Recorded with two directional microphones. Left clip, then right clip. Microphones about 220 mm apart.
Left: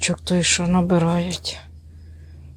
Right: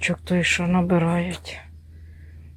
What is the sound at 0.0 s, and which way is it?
Speech, 15° left (ahead or behind).